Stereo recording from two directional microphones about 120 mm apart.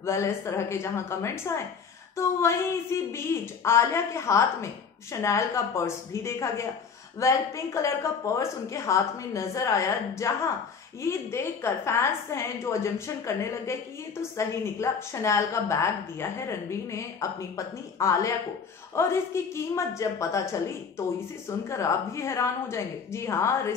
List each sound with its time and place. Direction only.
0.0 s a woman's voice: 25° left (ahead or behind)